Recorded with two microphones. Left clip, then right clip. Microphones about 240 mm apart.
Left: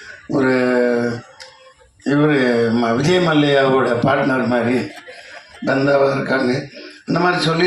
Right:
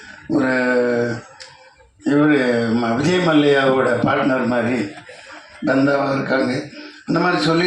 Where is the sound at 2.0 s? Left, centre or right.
Left.